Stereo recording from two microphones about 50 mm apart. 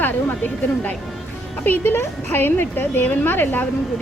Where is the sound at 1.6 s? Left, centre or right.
Left.